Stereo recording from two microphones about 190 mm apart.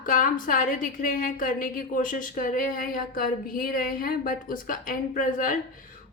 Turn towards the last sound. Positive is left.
turn(degrees=45)  # may be behind; listen again after turning